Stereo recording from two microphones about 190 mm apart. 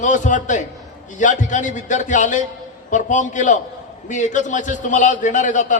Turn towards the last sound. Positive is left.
turn(degrees=40)  # may be behind; listen again after turning